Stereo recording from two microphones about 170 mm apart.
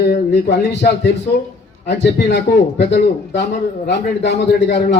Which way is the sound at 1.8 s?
90° left.